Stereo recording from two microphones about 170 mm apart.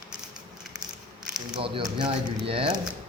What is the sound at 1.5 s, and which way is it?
Speech, 30° right (ahead or behind).